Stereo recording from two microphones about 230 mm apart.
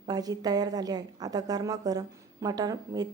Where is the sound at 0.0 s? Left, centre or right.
Centre.